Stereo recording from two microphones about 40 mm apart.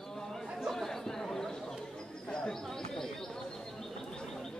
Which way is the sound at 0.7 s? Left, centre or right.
Centre.